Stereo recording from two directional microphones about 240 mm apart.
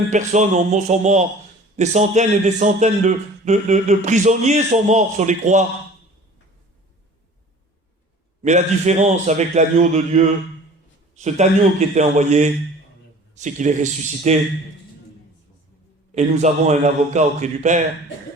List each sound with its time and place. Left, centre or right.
0.1 s a man's voice: right
8.4 s a man's voice: right
16.1 s a man's voice: right